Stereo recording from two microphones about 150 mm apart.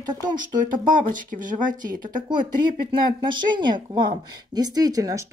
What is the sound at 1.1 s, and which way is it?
Speech, 60° right (ahead or behind).